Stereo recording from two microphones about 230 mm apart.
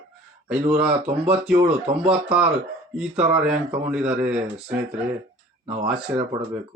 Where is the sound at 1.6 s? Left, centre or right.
Right.